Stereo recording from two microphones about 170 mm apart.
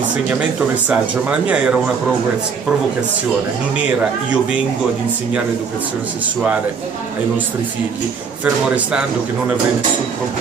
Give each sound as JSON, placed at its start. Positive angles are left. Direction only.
{"t": 0.4, "sound": "speech", "side_deg": -5}
{"t": 3.7, "sound": "speech", "side_deg": -5}
{"t": 8.6, "sound": "speech", "side_deg": -5}